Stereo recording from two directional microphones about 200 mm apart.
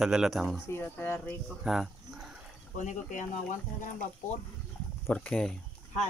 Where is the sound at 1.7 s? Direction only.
Centre (ahead or behind).